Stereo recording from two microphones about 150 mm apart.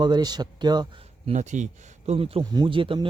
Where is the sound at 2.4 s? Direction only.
30° right (ahead or behind).